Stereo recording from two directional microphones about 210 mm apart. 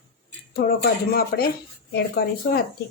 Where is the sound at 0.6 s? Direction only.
50° left (ahead or behind).